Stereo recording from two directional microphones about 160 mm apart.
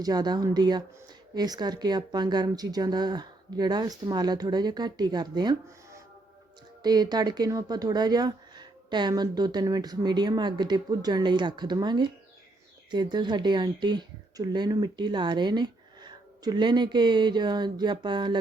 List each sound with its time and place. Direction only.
0.0 s speech: 25° right (ahead or behind)